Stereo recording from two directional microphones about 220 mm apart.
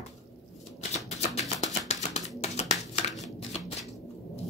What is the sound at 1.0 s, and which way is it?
Music, 30° left (ahead or behind).